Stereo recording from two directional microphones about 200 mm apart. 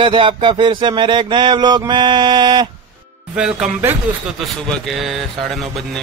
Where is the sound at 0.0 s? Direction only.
25° right (ahead or behind).